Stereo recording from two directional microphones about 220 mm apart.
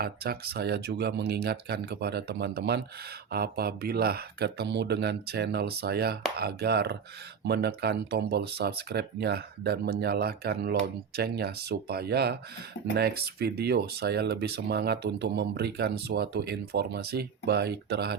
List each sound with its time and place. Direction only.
0.0 s speech: 45° right (ahead or behind)